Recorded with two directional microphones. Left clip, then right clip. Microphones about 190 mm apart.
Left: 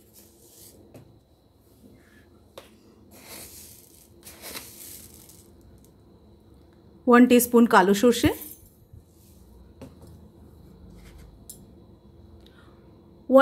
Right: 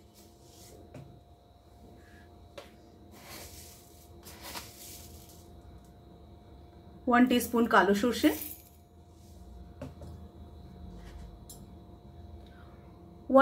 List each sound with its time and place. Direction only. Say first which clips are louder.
7.1 s speech: left 9 dB; 55° left (ahead or behind)